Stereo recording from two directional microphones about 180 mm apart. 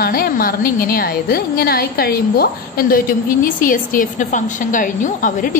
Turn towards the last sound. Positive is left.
turn(degrees=45)  # may be behind; listen again after turning